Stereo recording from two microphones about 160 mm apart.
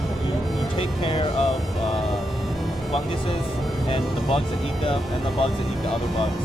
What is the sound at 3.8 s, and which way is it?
Speech, 35° left (ahead or behind).